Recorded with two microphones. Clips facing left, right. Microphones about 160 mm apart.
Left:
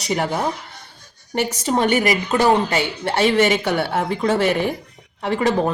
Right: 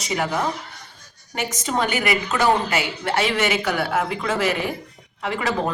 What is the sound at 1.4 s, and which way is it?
A woman's voice, 30° left (ahead or behind).